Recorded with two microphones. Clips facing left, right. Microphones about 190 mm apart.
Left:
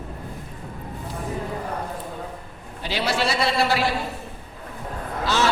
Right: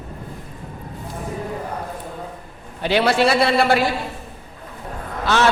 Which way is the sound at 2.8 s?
60° right (ahead or behind).